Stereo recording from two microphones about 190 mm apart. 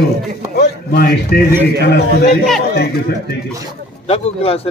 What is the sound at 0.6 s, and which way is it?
Speech, 55° left (ahead or behind).